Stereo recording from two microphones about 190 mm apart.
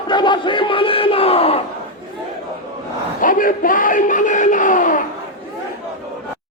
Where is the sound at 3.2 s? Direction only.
45° left (ahead or behind).